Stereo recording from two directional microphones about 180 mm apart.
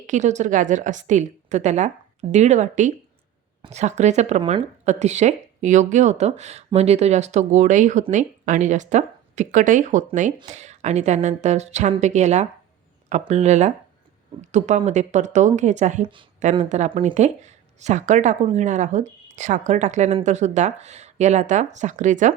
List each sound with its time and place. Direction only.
0.1 s speech: 40° right (ahead or behind)